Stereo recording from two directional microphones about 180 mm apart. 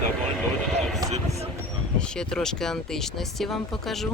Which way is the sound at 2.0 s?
5° left (ahead or behind).